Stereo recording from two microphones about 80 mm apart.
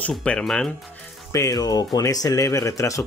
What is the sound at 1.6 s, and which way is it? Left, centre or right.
Speech, left.